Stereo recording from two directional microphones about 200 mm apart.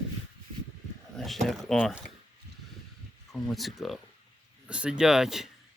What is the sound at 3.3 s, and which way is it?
Speech, centre (ahead or behind).